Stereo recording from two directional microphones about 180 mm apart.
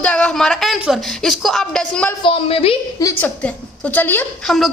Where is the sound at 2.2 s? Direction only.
30° left (ahead or behind).